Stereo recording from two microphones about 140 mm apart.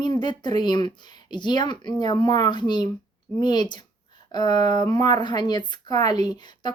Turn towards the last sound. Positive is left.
turn(degrees=30)  # may be behind; listen again after turning